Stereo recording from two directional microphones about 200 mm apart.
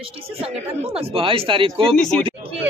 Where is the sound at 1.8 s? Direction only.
5° left (ahead or behind).